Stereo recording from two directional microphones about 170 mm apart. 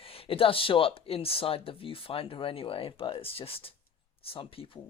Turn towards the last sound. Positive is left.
turn(degrees=35)  # may be behind; listen again after turning